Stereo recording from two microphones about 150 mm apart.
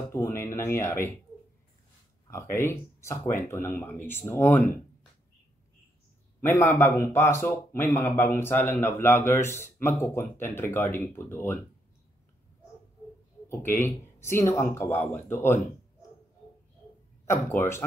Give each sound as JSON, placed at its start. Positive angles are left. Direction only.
{"t": 0.1, "sound": "music", "side_deg": 20}
{"t": 2.5, "sound": "speech", "side_deg": 15}
{"t": 6.4, "sound": "speech", "side_deg": 15}
{"t": 13.5, "sound": "speech", "side_deg": 15}
{"t": 17.3, "sound": "speech", "side_deg": 15}